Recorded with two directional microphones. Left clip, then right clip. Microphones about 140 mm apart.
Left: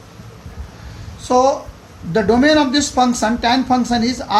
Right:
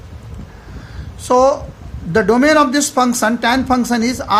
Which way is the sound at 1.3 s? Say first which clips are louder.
Right 2 dB; 90° right.